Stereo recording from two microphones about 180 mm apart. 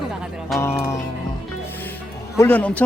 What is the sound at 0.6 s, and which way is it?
Speech, 15° left (ahead or behind).